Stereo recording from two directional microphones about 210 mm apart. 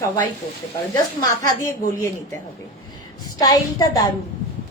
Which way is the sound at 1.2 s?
15° left (ahead or behind).